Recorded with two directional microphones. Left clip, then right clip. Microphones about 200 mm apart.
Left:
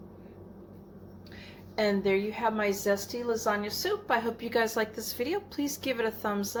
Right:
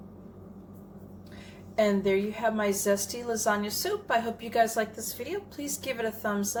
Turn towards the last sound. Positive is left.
turn(degrees=25)  # may be behind; listen again after turning